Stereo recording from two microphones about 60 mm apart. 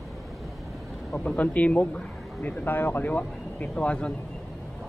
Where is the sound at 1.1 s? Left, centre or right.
Left.